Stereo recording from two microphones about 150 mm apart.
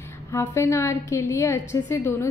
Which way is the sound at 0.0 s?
15° left (ahead or behind).